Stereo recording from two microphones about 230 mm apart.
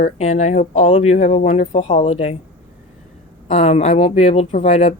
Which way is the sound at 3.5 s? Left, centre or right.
Left.